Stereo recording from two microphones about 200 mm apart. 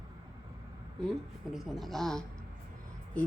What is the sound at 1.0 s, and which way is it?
A woman's voice, centre (ahead or behind).